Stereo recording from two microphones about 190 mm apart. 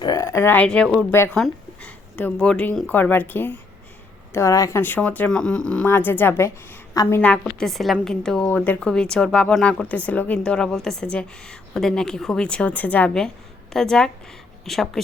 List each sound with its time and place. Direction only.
0.0 s a woman's voice: 20° left (ahead or behind)
7.2 s speech: 5° left (ahead or behind)